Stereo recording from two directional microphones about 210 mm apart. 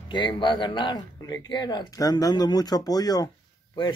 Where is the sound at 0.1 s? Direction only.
20° left (ahead or behind).